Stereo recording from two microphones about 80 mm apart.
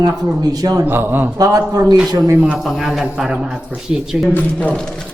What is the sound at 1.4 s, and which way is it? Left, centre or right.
Speech, right.